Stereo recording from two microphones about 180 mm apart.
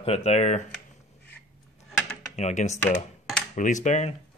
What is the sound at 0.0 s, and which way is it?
Speech, 35° left (ahead or behind).